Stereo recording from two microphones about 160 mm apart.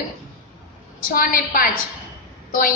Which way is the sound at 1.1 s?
60° left (ahead or behind).